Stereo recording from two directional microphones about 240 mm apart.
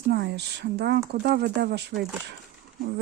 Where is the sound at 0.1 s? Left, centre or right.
Right.